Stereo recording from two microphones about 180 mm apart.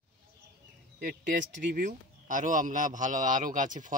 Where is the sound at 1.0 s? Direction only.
50° right (ahead or behind).